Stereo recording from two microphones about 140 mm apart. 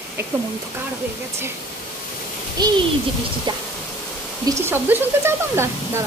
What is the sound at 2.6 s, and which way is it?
Speech, 30° right (ahead or behind).